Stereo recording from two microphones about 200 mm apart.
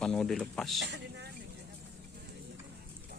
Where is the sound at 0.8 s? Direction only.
60° right (ahead or behind).